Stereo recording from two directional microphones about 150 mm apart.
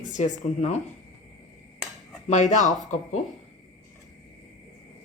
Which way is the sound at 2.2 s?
50° left (ahead or behind).